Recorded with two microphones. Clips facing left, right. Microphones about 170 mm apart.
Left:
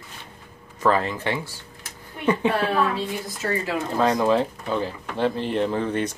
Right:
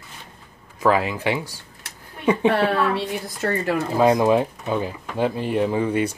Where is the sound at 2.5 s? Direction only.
60° right (ahead or behind).